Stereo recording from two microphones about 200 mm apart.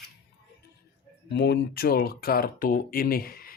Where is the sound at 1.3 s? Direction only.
60° left (ahead or behind).